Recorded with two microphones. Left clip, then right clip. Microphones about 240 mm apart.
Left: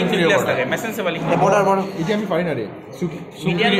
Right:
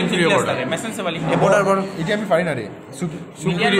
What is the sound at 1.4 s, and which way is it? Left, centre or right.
Speech, centre.